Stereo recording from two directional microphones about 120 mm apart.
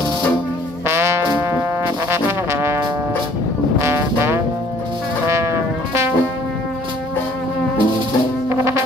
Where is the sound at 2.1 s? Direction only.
20° right (ahead or behind).